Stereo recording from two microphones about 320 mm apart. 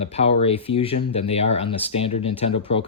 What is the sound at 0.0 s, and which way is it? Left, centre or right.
Speech, centre.